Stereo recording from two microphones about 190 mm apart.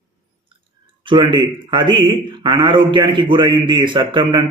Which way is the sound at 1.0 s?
25° right (ahead or behind).